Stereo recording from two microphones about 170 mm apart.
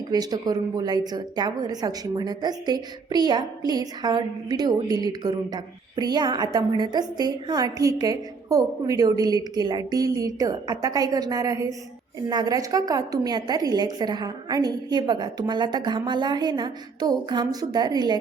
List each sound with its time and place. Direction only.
0.1 s a woman's voice: 25° right (ahead or behind)